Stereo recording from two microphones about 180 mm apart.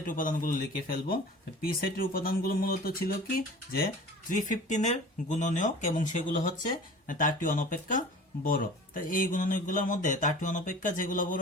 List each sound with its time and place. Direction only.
0.0 s speech: 50° left (ahead or behind)